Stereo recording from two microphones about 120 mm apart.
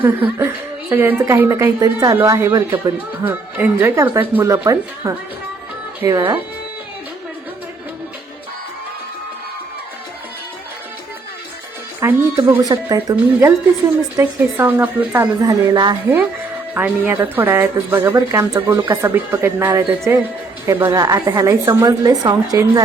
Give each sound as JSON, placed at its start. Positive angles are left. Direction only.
{"t": 0.0, "sound": "speech", "side_deg": -20}
{"t": 3.2, "sound": "speech", "side_deg": -15}
{"t": 12.0, "sound": "speech", "side_deg": -20}
{"t": 12.5, "sound": "speech", "side_deg": -30}
{"t": 14.2, "sound": "speech", "side_deg": -15}
{"t": 15.2, "sound": "speech", "side_deg": -30}
{"t": 16.7, "sound": "speech", "side_deg": -15}
{"t": 20.9, "sound": "speech", "side_deg": -30}